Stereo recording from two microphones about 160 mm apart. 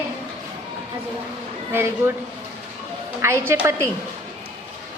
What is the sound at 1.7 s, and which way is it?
Speech, 15° right (ahead or behind).